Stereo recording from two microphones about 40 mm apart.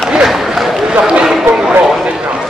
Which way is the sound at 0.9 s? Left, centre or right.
Right.